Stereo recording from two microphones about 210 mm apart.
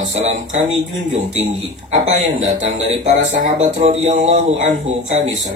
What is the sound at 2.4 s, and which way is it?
A man's voice, 40° right (ahead or behind).